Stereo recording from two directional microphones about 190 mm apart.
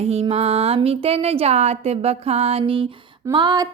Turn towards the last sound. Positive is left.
turn(degrees=-20)  # may be behind; listen again after turning